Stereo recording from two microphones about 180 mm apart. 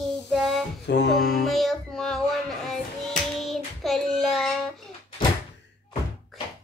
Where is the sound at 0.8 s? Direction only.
75° left (ahead or behind).